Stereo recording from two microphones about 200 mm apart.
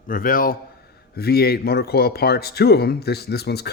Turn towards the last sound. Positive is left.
turn(degrees=55)  # may be behind; listen again after turning